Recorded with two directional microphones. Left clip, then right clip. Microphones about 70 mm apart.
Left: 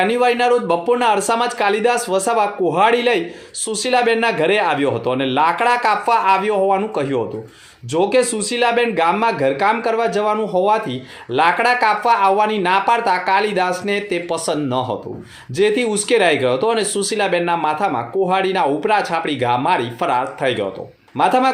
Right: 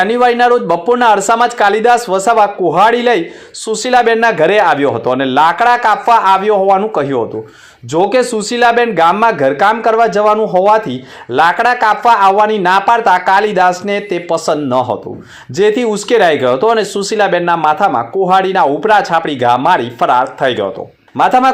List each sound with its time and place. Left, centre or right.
0.0 s speech: right